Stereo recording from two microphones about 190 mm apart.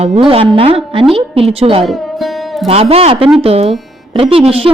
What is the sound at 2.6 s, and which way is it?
Speech, 30° right (ahead or behind).